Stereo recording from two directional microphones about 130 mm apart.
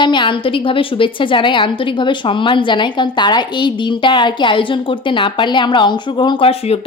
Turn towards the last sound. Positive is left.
turn(degrees=50)  # may be behind; listen again after turning